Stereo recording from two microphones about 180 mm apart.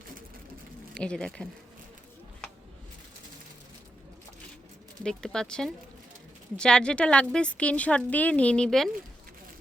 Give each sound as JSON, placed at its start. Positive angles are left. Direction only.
{"t": 0.9, "sound": "speech", "side_deg": 5}
{"t": 5.0, "sound": "speech", "side_deg": 5}